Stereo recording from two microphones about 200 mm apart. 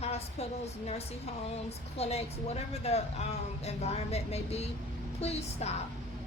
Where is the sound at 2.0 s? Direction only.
30° left (ahead or behind).